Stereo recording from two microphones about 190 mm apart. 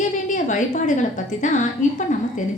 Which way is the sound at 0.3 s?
40° left (ahead or behind).